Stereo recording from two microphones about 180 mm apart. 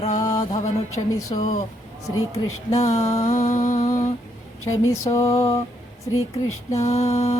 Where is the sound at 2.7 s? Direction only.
35° left (ahead or behind).